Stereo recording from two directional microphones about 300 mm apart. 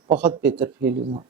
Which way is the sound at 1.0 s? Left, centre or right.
Right.